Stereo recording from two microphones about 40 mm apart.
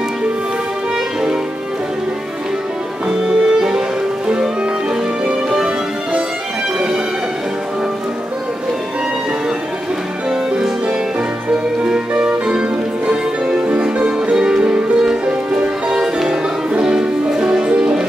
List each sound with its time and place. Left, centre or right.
3.1 s music: centre
12.2 s music: right